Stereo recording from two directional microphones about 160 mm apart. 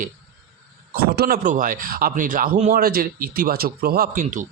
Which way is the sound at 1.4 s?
55° right (ahead or behind).